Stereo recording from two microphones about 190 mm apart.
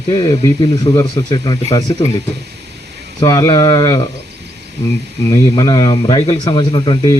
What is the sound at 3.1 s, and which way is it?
Speech, 15° left (ahead or behind).